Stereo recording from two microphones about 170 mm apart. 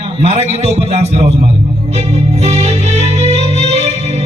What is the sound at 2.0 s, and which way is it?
Music, 40° right (ahead or behind).